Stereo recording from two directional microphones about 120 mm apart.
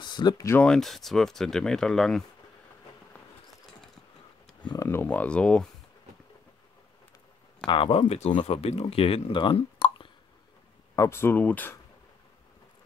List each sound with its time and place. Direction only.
0.0 s speech: 40° left (ahead or behind)
0.7 s speech: centre (ahead or behind)
4.8 s speech: 15° left (ahead or behind)
7.6 s speech: 45° left (ahead or behind)
11.0 s speech: 20° left (ahead or behind)